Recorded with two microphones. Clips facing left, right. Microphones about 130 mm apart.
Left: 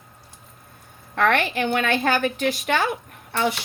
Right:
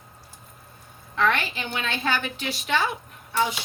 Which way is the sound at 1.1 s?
55° left (ahead or behind).